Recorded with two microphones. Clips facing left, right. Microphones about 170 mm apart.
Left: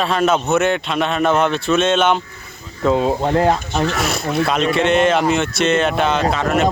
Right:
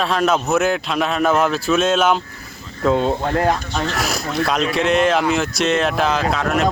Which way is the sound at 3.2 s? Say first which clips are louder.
Left 3 dB; 20° left (ahead or behind).